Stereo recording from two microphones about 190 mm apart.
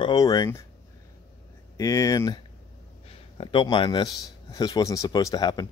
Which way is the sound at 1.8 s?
15° left (ahead or behind).